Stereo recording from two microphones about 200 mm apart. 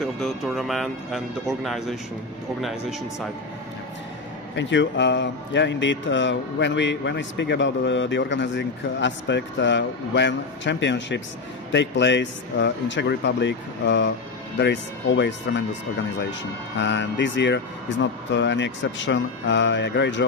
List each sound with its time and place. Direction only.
0.0 s speech: centre (ahead or behind)
4.6 s a man's voice: 65° left (ahead or behind)
16.7 s a man's voice: 60° left (ahead or behind)